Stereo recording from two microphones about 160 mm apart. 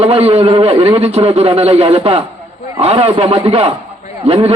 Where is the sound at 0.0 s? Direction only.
40° right (ahead or behind).